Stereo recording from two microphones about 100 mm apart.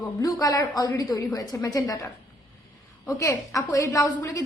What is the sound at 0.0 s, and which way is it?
A woman's voice, 40° left (ahead or behind).